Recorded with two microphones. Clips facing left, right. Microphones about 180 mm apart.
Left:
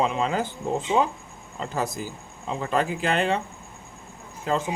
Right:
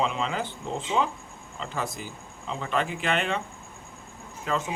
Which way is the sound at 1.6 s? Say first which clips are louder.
Left 4 dB; 40° left (ahead or behind).